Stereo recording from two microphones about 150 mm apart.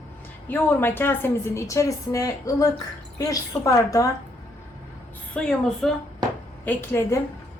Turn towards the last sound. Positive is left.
turn(degrees=15)  # may be behind; listen again after turning